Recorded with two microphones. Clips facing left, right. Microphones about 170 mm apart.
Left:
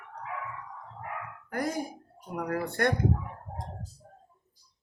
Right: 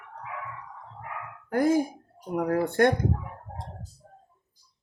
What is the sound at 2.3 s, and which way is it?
Speech, 50° right (ahead or behind).